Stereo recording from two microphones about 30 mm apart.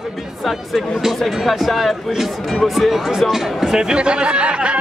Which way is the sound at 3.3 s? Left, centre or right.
Centre.